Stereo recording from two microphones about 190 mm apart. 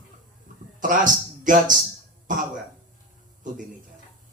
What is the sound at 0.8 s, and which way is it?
Speech, 45° right (ahead or behind).